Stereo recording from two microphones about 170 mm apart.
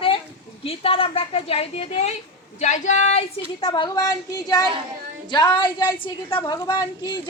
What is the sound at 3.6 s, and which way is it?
A woman's voice, 25° left (ahead or behind).